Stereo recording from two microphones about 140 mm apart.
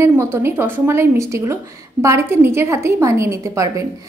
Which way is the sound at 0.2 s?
15° right (ahead or behind).